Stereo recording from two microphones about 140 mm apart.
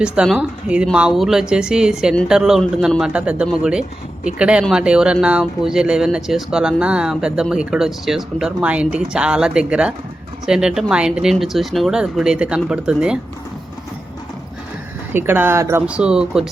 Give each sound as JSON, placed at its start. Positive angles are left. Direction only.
{"t": 0.0, "sound": "speech", "side_deg": -5}
{"t": 15.1, "sound": "speech", "side_deg": -15}
{"t": 15.9, "sound": "speech", "side_deg": -5}